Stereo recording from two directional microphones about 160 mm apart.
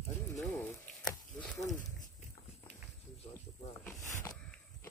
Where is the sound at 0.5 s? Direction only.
10° left (ahead or behind).